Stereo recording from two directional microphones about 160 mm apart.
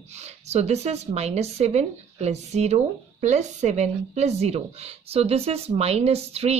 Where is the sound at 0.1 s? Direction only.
45° right (ahead or behind).